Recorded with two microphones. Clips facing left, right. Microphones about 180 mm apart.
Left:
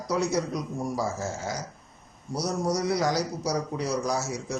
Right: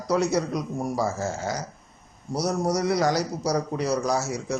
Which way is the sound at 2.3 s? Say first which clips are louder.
Right 3 dB; 60° right (ahead or behind).